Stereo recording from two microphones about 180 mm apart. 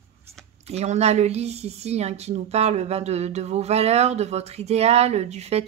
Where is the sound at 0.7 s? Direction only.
35° right (ahead or behind).